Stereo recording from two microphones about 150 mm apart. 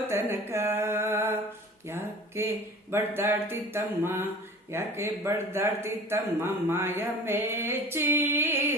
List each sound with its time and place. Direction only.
0.1 s music: 15° right (ahead or behind)
1.9 s speech: 15° right (ahead or behind)